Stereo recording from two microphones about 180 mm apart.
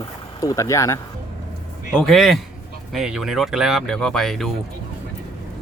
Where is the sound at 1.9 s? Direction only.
Centre (ahead or behind).